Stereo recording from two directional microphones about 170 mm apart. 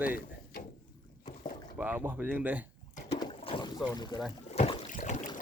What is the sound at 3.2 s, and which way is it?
Boat, 30° left (ahead or behind).